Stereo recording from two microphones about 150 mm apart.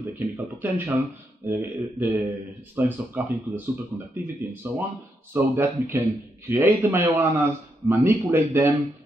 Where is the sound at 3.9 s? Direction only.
15° right (ahead or behind).